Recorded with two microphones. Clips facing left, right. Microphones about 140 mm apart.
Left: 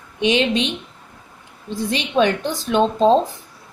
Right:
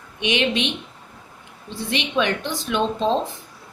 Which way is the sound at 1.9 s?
35° left (ahead or behind).